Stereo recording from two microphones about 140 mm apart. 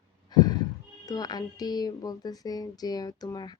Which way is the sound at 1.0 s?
25° left (ahead or behind).